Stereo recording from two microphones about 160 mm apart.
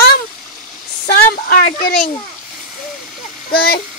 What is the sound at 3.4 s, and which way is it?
Speech, 70° left (ahead or behind).